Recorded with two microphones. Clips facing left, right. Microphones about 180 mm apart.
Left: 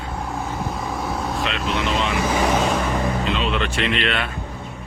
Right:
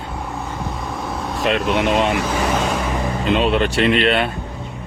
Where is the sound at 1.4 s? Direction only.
55° right (ahead or behind).